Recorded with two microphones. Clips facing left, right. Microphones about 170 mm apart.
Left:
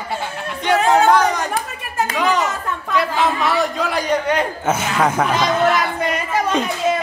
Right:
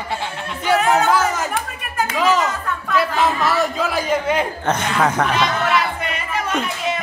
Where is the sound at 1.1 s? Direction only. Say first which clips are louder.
Left 3 dB; 5° right (ahead or behind).